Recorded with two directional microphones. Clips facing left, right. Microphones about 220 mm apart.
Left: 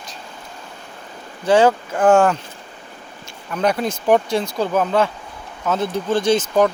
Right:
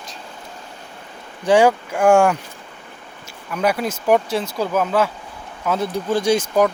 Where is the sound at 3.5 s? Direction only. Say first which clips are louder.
Left 1 dB; 5° right (ahead or behind).